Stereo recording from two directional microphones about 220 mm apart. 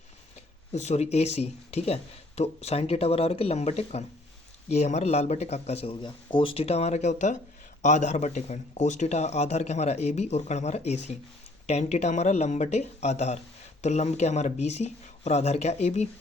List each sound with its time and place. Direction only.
0.3 s speech: 30° left (ahead or behind)